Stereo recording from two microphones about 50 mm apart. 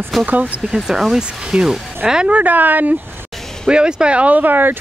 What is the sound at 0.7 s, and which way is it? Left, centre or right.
Speech, centre.